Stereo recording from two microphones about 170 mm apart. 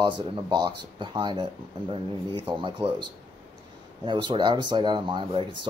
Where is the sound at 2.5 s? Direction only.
30° right (ahead or behind).